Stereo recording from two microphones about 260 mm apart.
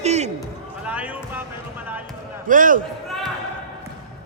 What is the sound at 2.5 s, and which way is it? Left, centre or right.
Speech, right.